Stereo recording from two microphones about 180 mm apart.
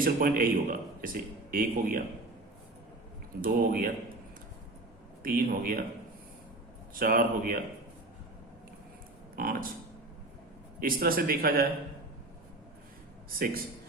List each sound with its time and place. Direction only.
0.0 s a man's voice: 55° right (ahead or behind)
3.4 s a man's voice: 55° right (ahead or behind)
5.2 s a man's voice: 50° right (ahead or behind)
6.9 s a man's voice: 50° right (ahead or behind)
9.3 s speech: 55° right (ahead or behind)
10.8 s a man's voice: 55° right (ahead or behind)